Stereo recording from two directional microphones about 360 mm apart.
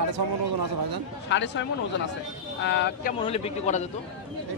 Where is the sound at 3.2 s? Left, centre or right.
Centre.